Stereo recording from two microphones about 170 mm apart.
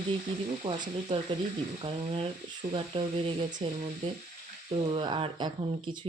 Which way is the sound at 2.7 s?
30° right (ahead or behind).